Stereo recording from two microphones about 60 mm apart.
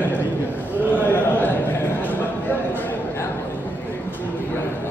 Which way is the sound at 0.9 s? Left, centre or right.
Left.